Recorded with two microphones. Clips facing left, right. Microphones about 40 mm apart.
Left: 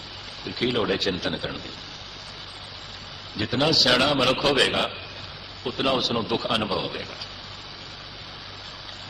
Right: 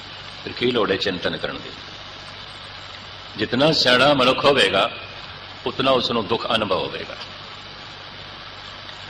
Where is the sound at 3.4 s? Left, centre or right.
Right.